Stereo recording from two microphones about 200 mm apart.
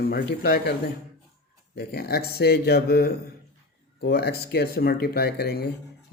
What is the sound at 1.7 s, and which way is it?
Speech, 50° left (ahead or behind).